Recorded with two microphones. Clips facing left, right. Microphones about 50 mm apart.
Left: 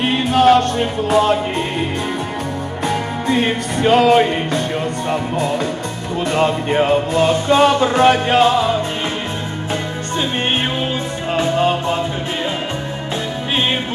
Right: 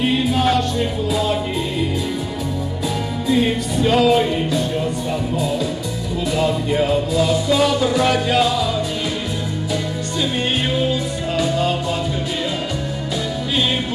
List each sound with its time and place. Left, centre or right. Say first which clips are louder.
0.0 s music: left 4 dB; left
3.3 s music: even; left
11.3 s music: left 4 dB; left